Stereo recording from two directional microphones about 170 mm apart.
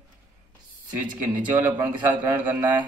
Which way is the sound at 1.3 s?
10° right (ahead or behind).